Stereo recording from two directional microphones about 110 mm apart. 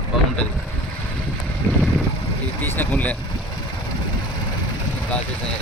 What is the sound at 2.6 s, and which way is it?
Speech, 15° left (ahead or behind).